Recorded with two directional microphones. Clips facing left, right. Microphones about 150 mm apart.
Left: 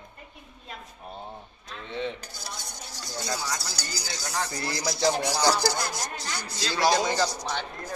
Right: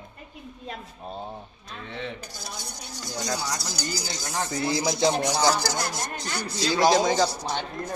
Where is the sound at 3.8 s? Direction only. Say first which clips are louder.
Right 4 dB; 20° right (ahead or behind).